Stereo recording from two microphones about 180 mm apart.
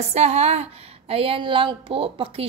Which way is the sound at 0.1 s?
35° right (ahead or behind).